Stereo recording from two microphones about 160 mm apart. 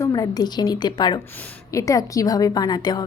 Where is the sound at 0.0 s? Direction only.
25° left (ahead or behind).